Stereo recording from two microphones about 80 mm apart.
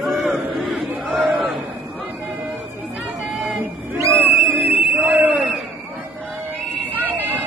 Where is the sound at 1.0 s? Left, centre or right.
Centre.